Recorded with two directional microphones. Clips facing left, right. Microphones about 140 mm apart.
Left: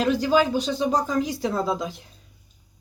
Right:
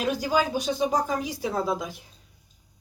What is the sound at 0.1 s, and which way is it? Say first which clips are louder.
Speech: left 3 dB; 10° right (ahead or behind).